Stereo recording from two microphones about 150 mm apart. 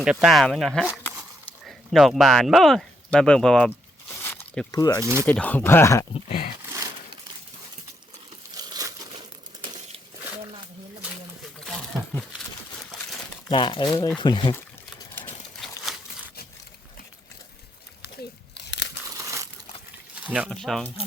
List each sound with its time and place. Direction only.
0.0 s speech: 5° right (ahead or behind)
4.2 s a sound: 15° left (ahead or behind)
4.8 s speech: 25° left (ahead or behind)
5.2 s speech: 10° left (ahead or behind)
6.2 s speech: 50° left (ahead or behind)
8.5 s crumpling: 25° right (ahead or behind)
11.6 s a sound: 5° left (ahead or behind)
13.5 s speech: 35° left (ahead or behind)
19.1 s crumpling: 20° right (ahead or behind)
20.2 s speech: 10° right (ahead or behind)
20.5 s speech: 5° left (ahead or behind)